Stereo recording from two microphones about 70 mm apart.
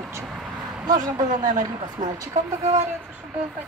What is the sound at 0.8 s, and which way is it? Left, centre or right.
Speech, right.